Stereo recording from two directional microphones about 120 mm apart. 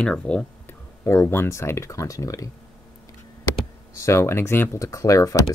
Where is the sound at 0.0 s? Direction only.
10° left (ahead or behind).